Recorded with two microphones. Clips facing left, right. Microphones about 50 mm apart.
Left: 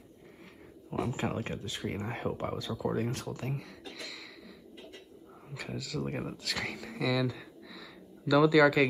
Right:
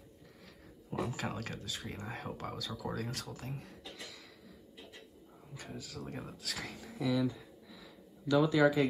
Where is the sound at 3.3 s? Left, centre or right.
Left.